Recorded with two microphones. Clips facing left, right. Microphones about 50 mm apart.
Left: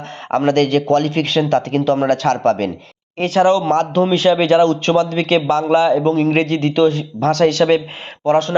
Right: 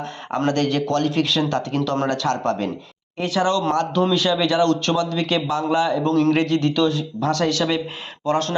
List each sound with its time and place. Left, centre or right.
0.3 s a man's voice: left
5.0 s a man's voice: left
7.2 s a man's voice: left